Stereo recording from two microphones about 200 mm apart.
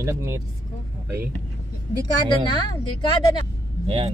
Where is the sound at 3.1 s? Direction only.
25° left (ahead or behind).